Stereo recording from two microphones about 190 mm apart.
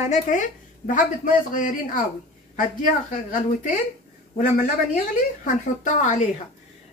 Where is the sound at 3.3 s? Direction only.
45° left (ahead or behind).